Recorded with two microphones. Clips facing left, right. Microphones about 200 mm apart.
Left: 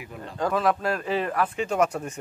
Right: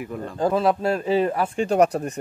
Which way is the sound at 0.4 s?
30° right (ahead or behind).